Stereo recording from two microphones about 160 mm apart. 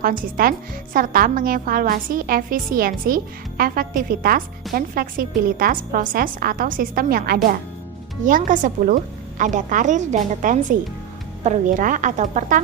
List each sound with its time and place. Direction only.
0.0 s a woman's voice: 60° right (ahead or behind)